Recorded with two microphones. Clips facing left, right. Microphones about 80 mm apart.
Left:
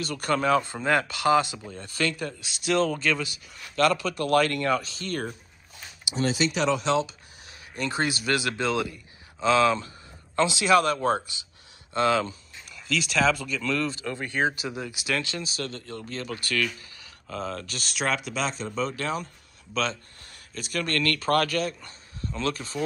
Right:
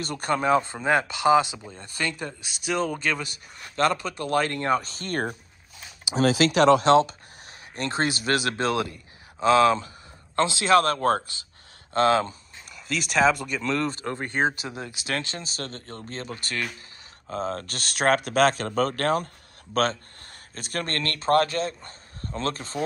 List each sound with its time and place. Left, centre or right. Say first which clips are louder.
0.0 s speech: even; right
2.7 s speech: left 2 dB; centre
3.2 s speech: left 2 dB; right
4.8 s speech: right 3 dB; right
6.2 s speech: right 6 dB; right
8.0 s speech: right 2 dB; right
9.4 s speech: right 3 dB; right
11.0 s speech: right 2 dB; right
12.8 s speech: right 1 dB; right
13.6 s speech: right 1 dB; right
13.8 s speech: right 2 dB; right